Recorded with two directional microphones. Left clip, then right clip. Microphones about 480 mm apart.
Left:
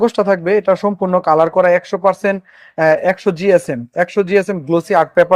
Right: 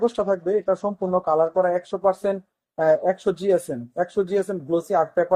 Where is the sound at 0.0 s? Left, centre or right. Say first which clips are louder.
Left 8 dB; left.